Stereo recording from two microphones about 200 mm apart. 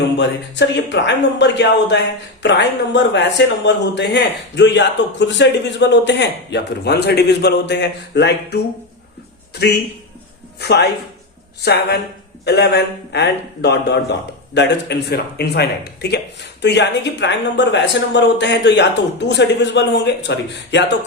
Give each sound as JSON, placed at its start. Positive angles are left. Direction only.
{"t": 0.2, "sound": "a man's voice", "side_deg": 60}
{"t": 10.6, "sound": "a man's voice", "side_deg": 55}